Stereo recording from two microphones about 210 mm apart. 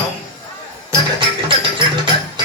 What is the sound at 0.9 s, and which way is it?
Music, 20° right (ahead or behind).